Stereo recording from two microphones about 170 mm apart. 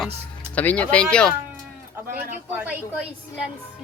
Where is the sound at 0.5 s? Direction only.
10° left (ahead or behind).